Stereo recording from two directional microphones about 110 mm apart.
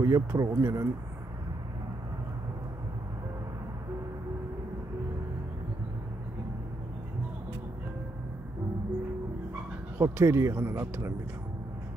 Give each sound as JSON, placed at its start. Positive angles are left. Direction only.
{"t": 0.0, "sound": "speech", "side_deg": -30}
{"t": 9.9, "sound": "speech", "side_deg": -20}